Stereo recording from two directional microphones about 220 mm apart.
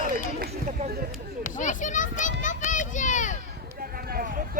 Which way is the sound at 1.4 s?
35° left (ahead or behind).